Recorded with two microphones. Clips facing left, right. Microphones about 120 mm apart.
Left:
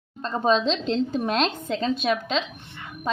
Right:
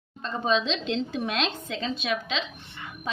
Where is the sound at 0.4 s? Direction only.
40° left (ahead or behind).